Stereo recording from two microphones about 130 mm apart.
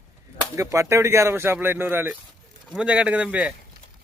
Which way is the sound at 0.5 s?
25° right (ahead or behind).